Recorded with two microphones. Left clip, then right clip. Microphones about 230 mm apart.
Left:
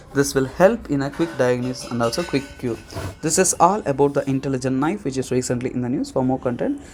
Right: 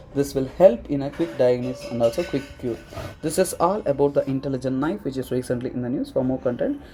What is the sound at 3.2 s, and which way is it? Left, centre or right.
Speech, left.